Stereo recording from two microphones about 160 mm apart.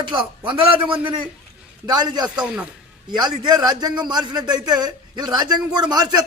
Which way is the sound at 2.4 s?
5° right (ahead or behind).